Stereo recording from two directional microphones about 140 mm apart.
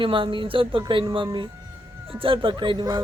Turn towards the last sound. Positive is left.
turn(degrees=-35)  # may be behind; listen again after turning